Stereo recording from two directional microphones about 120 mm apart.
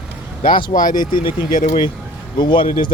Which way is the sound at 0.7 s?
60° left (ahead or behind).